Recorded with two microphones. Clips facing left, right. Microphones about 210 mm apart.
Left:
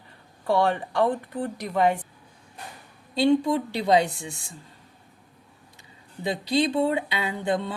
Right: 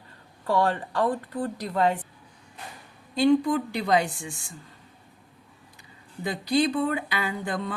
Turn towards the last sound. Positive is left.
turn(degrees=25)  # may be behind; listen again after turning